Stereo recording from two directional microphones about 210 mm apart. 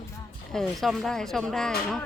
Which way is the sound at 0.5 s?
Centre (ahead or behind).